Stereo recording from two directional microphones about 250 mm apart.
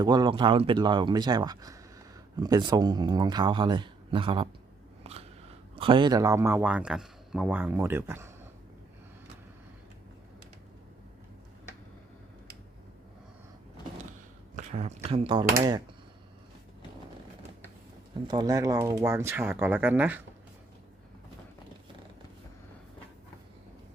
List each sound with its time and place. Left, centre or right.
0.0 s speech: centre
5.0 s scissors: right
5.7 s speech: right
14.5 s speech: right
18.3 s speech: centre